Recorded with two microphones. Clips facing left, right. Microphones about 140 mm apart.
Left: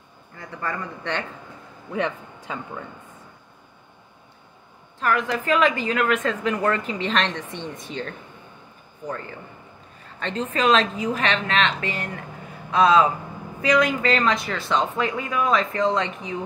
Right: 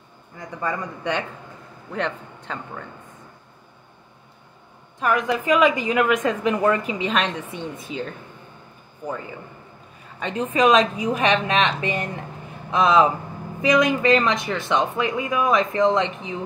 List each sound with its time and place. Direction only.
0.4 s a woman's voice: 15° right (ahead or behind)
1.9 s a man's voice: 5° left (ahead or behind)
5.0 s a woman's voice: 15° right (ahead or behind)